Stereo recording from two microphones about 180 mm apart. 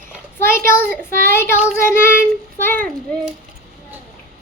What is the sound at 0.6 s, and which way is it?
Child singing, 10° left (ahead or behind).